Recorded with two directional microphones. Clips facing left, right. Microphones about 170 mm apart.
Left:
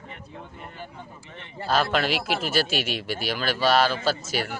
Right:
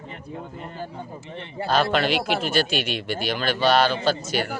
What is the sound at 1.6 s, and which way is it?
Speech, 5° left (ahead or behind).